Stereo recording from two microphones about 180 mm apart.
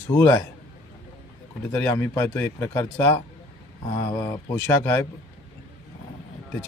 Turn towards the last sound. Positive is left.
turn(degrees=10)  # may be behind; listen again after turning